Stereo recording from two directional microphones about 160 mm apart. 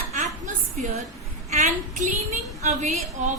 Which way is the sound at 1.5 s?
45° right (ahead or behind).